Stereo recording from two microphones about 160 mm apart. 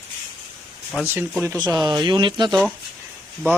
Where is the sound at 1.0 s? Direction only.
15° right (ahead or behind).